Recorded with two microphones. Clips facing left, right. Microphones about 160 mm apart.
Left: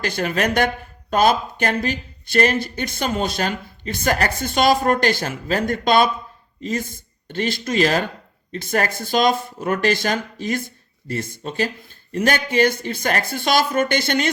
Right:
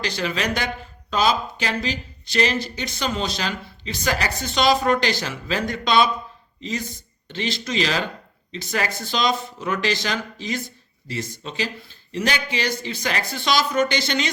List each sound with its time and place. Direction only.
0.0 s speech: 50° left (ahead or behind)